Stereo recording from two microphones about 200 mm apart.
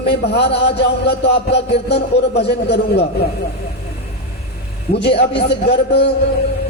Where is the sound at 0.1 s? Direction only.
55° left (ahead or behind).